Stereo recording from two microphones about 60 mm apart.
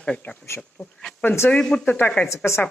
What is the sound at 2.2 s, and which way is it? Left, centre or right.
Speech, left.